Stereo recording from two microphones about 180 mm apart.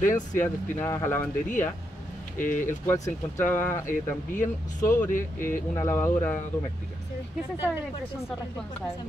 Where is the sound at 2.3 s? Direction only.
45° left (ahead or behind).